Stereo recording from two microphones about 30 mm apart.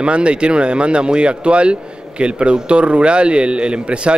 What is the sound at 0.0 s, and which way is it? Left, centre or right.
Speech, right.